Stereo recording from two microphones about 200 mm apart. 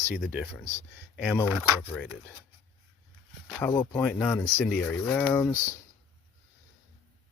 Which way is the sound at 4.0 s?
10° left (ahead or behind).